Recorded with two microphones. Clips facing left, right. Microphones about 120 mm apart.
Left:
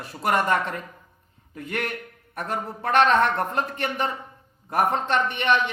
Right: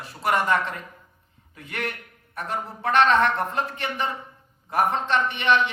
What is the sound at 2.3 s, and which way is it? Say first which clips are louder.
A man's voice: left 1 dB; 45° left (ahead or behind).